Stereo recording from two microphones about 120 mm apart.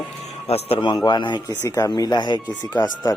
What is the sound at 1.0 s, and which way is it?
Speech, 40° left (ahead or behind).